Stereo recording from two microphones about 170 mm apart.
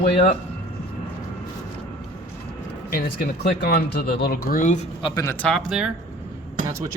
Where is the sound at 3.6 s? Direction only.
75° left (ahead or behind); by 4.9 s 45° left (ahead or behind).